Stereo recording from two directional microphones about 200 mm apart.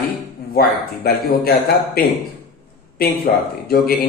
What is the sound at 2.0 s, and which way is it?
Speech, 50° left (ahead or behind).